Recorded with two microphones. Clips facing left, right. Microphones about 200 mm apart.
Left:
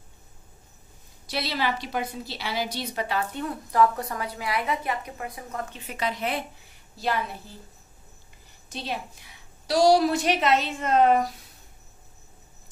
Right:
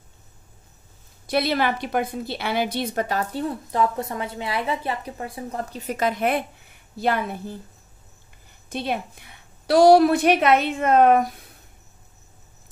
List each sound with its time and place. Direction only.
1.2 s a woman's voice: 55° right (ahead or behind)
8.6 s a woman's voice: 55° right (ahead or behind)